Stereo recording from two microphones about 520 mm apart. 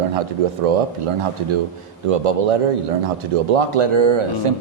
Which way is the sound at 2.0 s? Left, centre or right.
Right.